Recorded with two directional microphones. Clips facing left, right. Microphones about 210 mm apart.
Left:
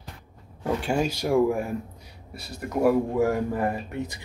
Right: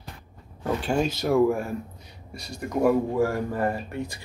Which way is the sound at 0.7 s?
10° left (ahead or behind).